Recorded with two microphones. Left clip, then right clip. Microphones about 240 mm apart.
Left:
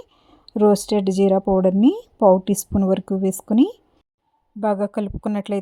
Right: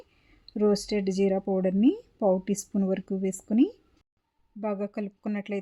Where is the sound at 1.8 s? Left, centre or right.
Centre.